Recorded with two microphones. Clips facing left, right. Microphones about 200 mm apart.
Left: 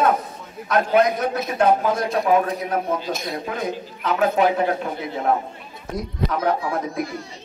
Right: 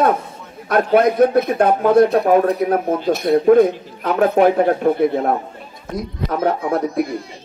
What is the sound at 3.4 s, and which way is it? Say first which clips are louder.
A man's voice: right 15 dB; 50° right (ahead or behind).